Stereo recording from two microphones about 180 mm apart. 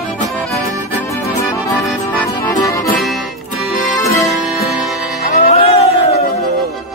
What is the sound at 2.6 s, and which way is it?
Music, 20° left (ahead or behind).